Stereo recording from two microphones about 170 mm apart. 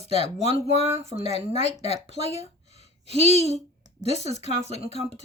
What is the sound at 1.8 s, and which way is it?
Speech, 40° left (ahead or behind).